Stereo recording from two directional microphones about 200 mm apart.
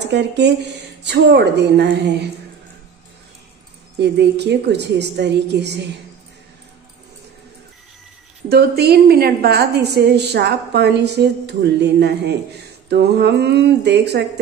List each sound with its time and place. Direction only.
0.1 s a woman's voice: 60° right (ahead or behind)
4.0 s a woman's voice: 55° right (ahead or behind)
8.5 s a woman's voice: 50° right (ahead or behind)